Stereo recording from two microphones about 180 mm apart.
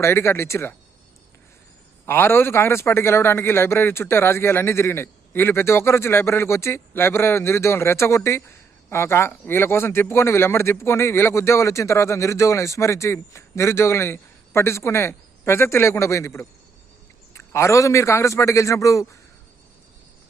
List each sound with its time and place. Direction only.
0.0 s a man's voice: 15° left (ahead or behind)
2.0 s a man's voice: 15° left (ahead or behind)